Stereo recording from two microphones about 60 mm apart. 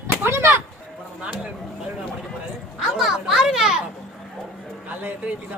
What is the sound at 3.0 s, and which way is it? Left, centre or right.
Children playing, centre.